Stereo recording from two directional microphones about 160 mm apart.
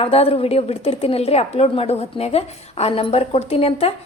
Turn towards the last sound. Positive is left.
turn(degrees=35)  # may be behind; listen again after turning